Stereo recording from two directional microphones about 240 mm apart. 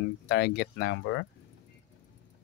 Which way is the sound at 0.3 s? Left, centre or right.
Left.